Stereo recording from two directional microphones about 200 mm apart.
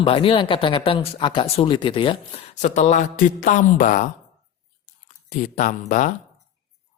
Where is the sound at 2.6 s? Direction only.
35° left (ahead or behind).